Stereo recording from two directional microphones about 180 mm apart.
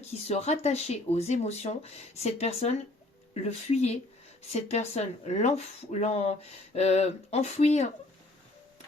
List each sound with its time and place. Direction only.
0.3 s speech: 40° left (ahead or behind)